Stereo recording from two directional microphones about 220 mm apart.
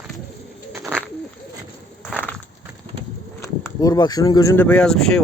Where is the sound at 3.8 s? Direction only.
15° left (ahead or behind).